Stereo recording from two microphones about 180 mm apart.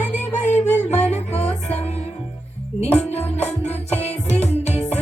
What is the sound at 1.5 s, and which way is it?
Music, 5° left (ahead or behind).